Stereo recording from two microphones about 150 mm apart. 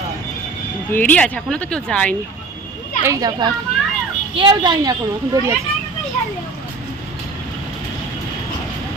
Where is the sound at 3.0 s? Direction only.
25° right (ahead or behind).